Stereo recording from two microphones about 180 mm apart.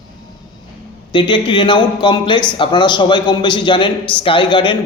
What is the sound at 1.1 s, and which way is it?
A man's voice, 30° left (ahead or behind).